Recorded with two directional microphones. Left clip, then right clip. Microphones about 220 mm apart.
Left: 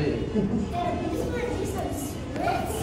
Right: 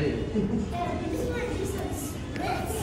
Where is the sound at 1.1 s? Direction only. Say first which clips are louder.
Left 2 dB; centre (ahead or behind).